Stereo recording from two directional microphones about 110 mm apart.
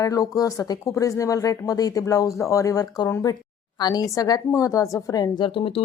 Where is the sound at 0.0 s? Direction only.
30° left (ahead or behind).